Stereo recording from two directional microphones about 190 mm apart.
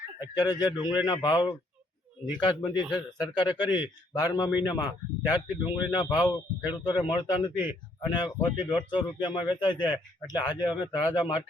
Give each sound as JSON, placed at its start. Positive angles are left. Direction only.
{"t": 0.2, "sound": "speech", "side_deg": 20}